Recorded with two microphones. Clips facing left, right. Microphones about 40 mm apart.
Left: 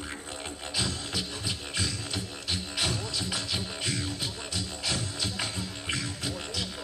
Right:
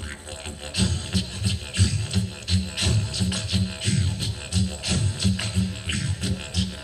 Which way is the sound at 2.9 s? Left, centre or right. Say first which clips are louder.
Right 4 dB; right.